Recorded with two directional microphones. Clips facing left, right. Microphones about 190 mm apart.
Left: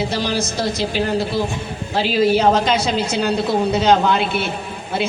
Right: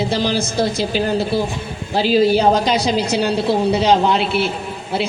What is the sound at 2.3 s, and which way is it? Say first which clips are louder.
A man's voice: right 1 dB; 35° right (ahead or behind).